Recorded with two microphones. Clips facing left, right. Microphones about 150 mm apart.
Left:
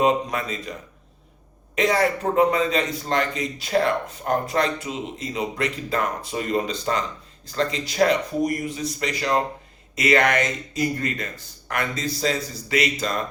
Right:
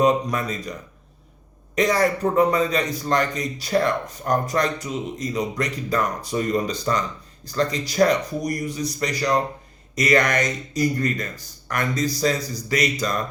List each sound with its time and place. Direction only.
0.0 s a man's voice: 40° right (ahead or behind)
1.7 s a man's voice: 40° right (ahead or behind)